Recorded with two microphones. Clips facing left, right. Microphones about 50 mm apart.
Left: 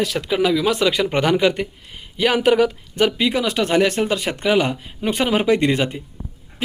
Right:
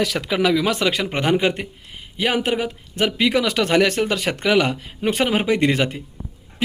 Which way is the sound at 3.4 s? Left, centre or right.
Right.